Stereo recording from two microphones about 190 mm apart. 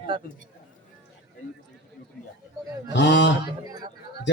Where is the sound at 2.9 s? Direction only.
70° left (ahead or behind).